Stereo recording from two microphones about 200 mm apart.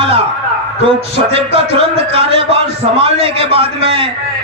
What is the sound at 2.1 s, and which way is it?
A man's voice, 30° right (ahead or behind).